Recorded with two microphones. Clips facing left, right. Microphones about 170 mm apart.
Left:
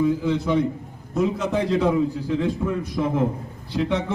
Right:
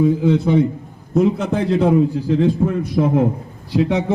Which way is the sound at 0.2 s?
55° right (ahead or behind).